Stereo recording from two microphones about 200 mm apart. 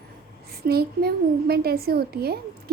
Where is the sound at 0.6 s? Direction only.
50° right (ahead or behind).